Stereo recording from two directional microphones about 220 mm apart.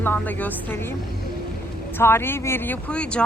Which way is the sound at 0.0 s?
10° left (ahead or behind).